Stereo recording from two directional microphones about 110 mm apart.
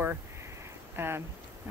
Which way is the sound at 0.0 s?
20° right (ahead or behind).